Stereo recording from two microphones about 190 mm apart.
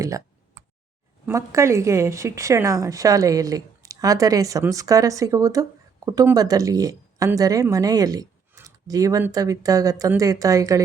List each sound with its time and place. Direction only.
1.3 s speech: 15° right (ahead or behind)